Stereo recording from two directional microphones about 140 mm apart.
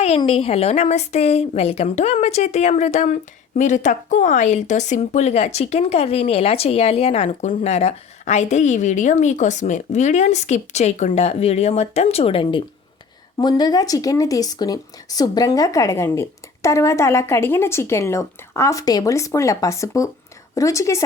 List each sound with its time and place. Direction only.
0.2 s a woman's voice: 45° left (ahead or behind); by 21.0 s 20° left (ahead or behind)